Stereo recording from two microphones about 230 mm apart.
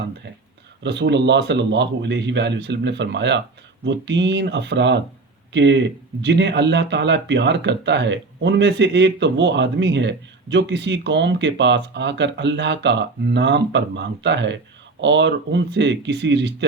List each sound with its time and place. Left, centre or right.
0.8 s speech: right